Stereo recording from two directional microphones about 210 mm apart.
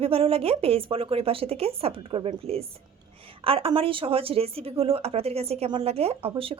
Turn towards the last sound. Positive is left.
turn(degrees=-25)  # may be behind; listen again after turning